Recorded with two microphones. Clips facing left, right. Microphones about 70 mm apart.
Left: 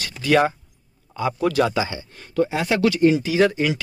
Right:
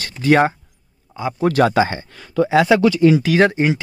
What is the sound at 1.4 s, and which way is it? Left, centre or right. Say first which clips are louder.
Speech: right 6 dB; right.